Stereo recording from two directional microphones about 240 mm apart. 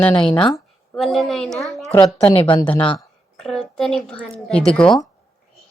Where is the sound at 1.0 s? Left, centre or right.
Centre.